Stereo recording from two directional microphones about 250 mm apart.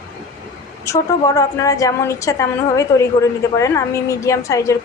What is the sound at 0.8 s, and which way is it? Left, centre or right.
A woman's voice, centre.